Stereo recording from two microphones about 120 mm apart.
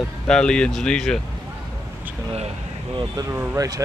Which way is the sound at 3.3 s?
25° right (ahead or behind).